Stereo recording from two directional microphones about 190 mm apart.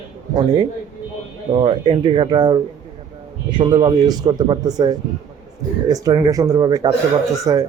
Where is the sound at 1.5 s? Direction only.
25° right (ahead or behind).